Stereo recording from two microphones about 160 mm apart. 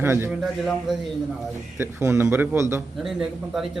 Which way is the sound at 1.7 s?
15° right (ahead or behind).